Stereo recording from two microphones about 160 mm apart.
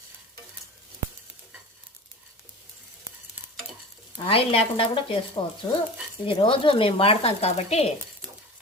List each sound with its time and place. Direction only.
4.3 s speech: 35° left (ahead or behind)